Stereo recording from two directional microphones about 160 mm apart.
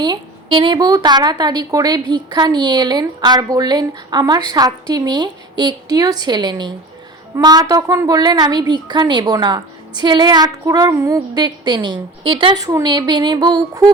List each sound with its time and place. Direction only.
0.0 s a woman's voice: 30° right (ahead or behind)